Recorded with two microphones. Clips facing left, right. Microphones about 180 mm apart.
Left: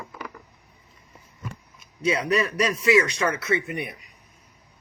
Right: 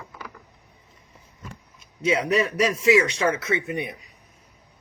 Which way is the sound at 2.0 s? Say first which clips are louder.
Right 1 dB; 25° right (ahead or behind).